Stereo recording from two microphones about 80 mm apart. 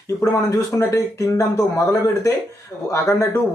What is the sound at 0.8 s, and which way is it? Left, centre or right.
Speech, left.